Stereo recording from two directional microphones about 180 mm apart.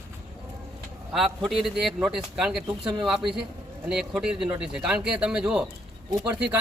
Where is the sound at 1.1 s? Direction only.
Centre (ahead or behind).